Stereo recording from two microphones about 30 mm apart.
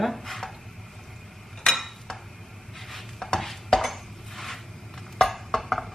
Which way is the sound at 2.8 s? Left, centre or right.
Centre.